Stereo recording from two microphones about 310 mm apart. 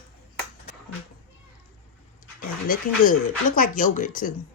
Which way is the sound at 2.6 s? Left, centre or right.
Left.